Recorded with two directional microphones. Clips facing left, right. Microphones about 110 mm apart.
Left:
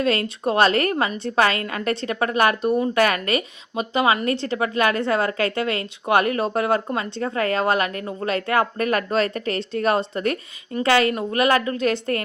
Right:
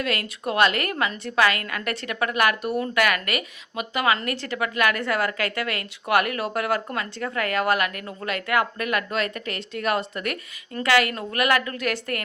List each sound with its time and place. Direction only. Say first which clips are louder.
0.0 s a woman's voice: left 6 dB; 30° left (ahead or behind)